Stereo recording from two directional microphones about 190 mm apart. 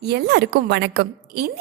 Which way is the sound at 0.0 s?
60° right (ahead or behind).